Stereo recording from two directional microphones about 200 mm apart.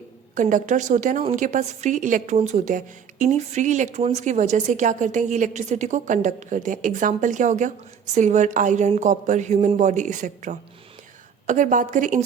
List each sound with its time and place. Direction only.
0.3 s a woman's voice: 40° right (ahead or behind)